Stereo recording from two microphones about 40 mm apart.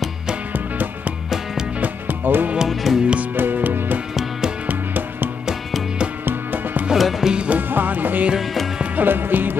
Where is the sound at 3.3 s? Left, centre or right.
Right.